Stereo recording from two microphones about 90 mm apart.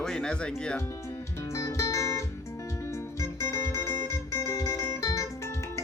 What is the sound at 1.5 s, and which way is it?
Music, 35° left (ahead or behind).